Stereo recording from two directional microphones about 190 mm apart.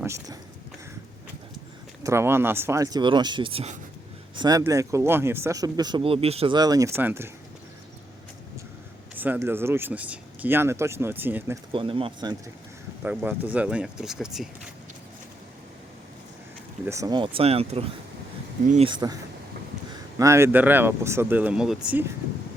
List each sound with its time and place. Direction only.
0.0 s speech: 15° right (ahead or behind)
2.0 s speech: 15° right (ahead or behind); by 3.8 s 30° right (ahead or behind)
4.4 s speech: 20° right (ahead or behind)
9.1 s speech: 10° right (ahead or behind)
11.7 s speech: 30° right (ahead or behind)
13.1 s speech: 10° right (ahead or behind)
16.8 s speech: 15° right (ahead or behind); by 18.9 s 40° right (ahead or behind)
18.9 s speech: 20° right (ahead or behind); by 22.0 s 5° right (ahead or behind)